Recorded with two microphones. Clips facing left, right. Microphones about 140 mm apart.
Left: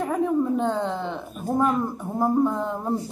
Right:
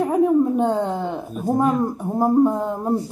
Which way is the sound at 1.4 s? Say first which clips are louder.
Right 4 dB; 15° right (ahead or behind).